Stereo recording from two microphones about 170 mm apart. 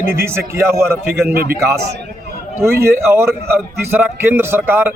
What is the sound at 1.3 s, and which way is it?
Speech, 65° right (ahead or behind).